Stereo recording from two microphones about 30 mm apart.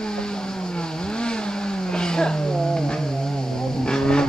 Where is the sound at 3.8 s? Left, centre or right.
Left.